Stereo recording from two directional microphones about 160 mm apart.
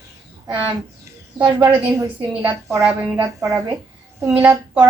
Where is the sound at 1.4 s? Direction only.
25° right (ahead or behind).